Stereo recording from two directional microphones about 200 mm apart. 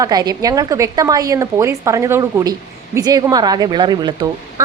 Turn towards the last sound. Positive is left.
turn(degrees=-20)  # may be behind; listen again after turning